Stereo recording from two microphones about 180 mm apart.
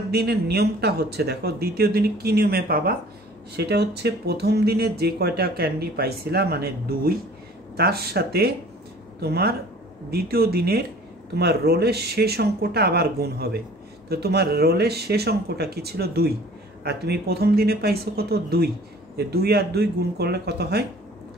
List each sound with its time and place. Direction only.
0.1 s speech: 65° right (ahead or behind)